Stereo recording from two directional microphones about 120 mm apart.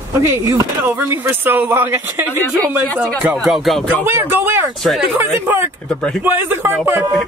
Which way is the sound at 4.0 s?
15° right (ahead or behind).